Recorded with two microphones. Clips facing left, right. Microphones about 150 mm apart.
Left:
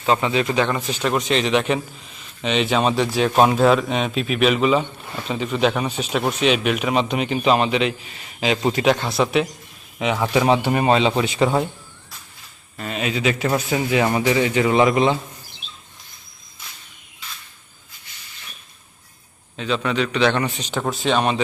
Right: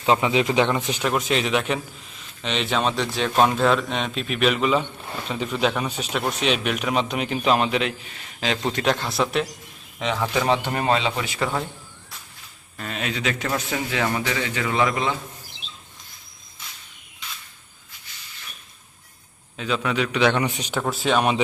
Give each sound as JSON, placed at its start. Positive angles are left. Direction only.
{"t": 0.0, "sound": "a man's voice", "side_deg": -15}
{"t": 1.0, "sound": "a man's voice", "side_deg": -5}
{"t": 12.7, "sound": "a man's voice", "side_deg": 5}
{"t": 19.5, "sound": "a man's voice", "side_deg": -5}